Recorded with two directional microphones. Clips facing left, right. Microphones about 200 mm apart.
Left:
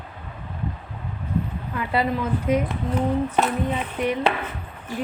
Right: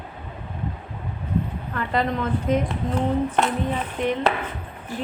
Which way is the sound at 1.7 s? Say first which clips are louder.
Even; 10° left (ahead or behind).